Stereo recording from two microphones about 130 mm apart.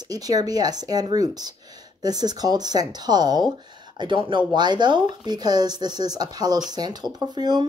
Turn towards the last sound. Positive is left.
turn(degrees=-35)  # may be behind; listen again after turning